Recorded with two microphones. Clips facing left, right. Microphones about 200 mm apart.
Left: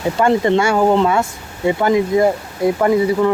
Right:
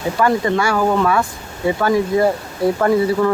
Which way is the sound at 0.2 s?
25° left (ahead or behind).